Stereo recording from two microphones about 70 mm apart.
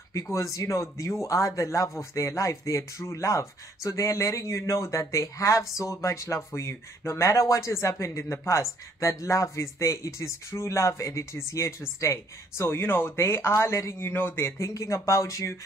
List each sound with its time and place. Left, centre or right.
0.1 s speech: left
14.6 s speech: left